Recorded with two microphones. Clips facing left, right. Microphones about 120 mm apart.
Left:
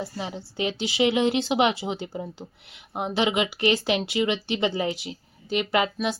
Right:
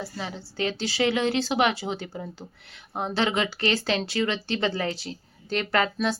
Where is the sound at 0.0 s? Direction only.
20° left (ahead or behind).